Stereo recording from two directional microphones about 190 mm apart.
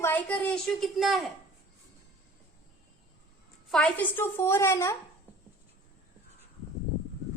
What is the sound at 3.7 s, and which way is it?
A woman's voice, 5° left (ahead or behind).